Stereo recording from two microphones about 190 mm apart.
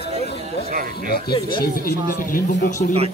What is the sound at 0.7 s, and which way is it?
Speech, 50° right (ahead or behind).